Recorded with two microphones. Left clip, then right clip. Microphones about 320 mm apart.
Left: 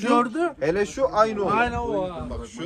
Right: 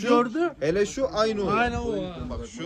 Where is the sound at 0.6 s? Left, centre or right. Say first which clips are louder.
Left 2 dB; centre.